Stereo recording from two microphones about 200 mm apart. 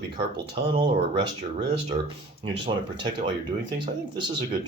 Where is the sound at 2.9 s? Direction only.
20° right (ahead or behind).